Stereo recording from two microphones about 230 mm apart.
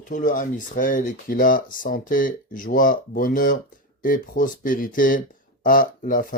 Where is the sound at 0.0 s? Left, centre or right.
Left.